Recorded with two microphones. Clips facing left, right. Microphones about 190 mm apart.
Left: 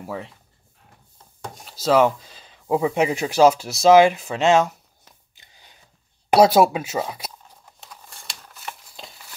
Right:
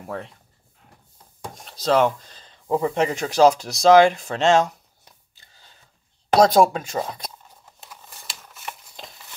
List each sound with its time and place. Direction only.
0.0 s speech: centre (ahead or behind)
1.6 s speech: 5° left (ahead or behind)
5.3 s a sound: 15° left (ahead or behind); by 9.3 s centre (ahead or behind)